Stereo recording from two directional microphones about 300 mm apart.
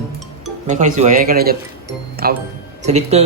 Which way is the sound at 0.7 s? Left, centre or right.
Right.